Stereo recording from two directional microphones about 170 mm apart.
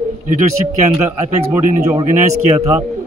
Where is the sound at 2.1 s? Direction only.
45° right (ahead or behind).